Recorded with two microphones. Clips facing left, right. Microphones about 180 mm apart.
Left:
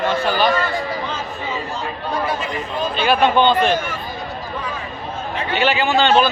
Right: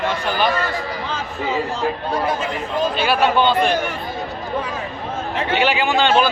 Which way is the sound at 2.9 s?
5° right (ahead or behind).